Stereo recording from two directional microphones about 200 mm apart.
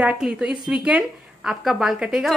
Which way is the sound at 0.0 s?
5° right (ahead or behind).